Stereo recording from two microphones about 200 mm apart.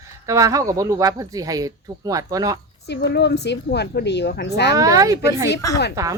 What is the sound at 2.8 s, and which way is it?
A woman's voice, 55° left (ahead or behind).